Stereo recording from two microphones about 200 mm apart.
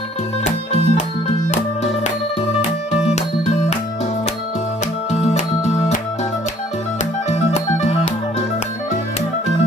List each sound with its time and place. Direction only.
0.4 s music: 35° left (ahead or behind)
5.2 s music: 35° left (ahead or behind)
7.0 s music: 35° left (ahead or behind)